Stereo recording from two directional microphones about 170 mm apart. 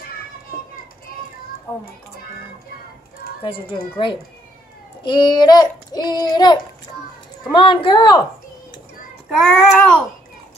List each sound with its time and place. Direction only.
1.7 s a child's voice: 20° left (ahead or behind)
3.4 s a child's voice: 30° left (ahead or behind)
9.3 s child singing: centre (ahead or behind)